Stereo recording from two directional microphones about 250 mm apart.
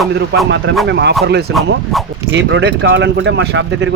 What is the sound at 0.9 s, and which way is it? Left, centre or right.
Speech, right.